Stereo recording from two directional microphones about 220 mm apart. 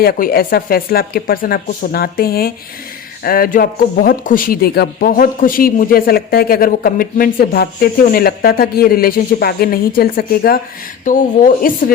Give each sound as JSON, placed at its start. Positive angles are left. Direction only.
{"t": 0.0, "sound": "speech", "side_deg": 40}